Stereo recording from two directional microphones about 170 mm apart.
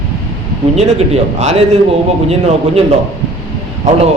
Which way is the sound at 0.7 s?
40° right (ahead or behind).